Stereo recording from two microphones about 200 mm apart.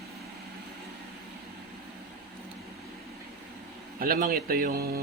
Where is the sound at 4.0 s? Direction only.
45° right (ahead or behind).